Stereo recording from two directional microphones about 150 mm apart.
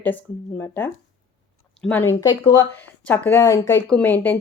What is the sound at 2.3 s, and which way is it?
Speech, 25° left (ahead or behind).